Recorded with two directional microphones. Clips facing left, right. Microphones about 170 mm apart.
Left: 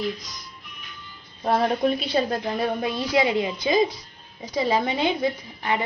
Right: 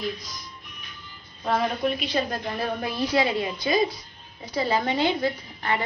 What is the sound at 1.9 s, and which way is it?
A woman's voice, 30° left (ahead or behind).